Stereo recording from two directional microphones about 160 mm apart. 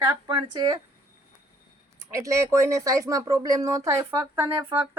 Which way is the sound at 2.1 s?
20° right (ahead or behind).